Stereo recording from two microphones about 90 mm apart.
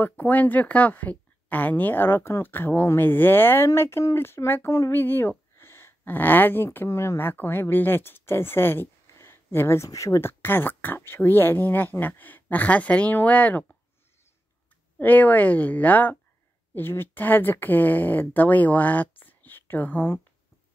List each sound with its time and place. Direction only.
0.0 s speech: 20° left (ahead or behind); by 10.3 s 35° left (ahead or behind)
10.4 s speech: 25° left (ahead or behind)
15.0 s speech: 20° left (ahead or behind)